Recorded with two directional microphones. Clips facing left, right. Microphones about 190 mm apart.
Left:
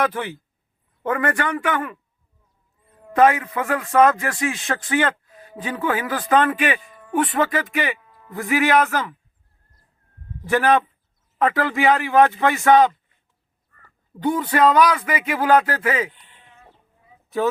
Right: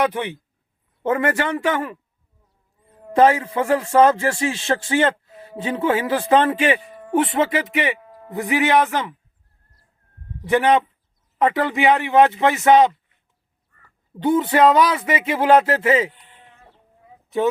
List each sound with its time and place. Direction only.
0.0 s a man's voice: 20° right (ahead or behind)
3.2 s a man's voice: 30° right (ahead or behind)
7.2 s a man's voice: 25° right (ahead or behind)
7.9 s a sound: 45° right (ahead or behind)
8.3 s a man's voice: 20° right (ahead or behind)
10.4 s a man's voice: 20° right (ahead or behind)
14.2 s a man's voice: 25° right (ahead or behind)
17.2 s a sound: 20° right (ahead or behind)